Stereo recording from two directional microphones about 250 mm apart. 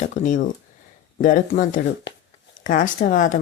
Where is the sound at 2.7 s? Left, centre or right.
Left.